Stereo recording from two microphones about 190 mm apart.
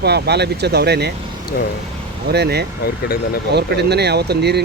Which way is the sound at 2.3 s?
60° right (ahead or behind).